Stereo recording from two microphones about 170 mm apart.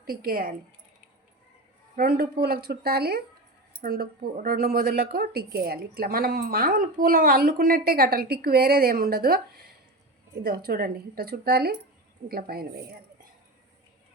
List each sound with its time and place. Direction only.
0.0 s speech: 60° right (ahead or behind)
2.0 s speech: 60° right (ahead or behind)